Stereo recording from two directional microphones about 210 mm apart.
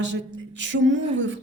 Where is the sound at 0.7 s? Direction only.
65° right (ahead or behind).